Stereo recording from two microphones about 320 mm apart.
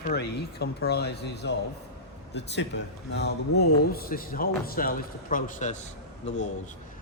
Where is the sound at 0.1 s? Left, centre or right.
Left.